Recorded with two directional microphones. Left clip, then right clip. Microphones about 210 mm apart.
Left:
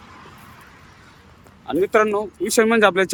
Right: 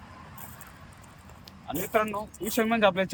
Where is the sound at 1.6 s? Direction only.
20° left (ahead or behind).